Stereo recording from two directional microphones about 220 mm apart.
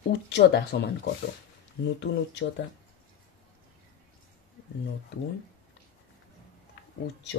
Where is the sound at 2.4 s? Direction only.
45° left (ahead or behind).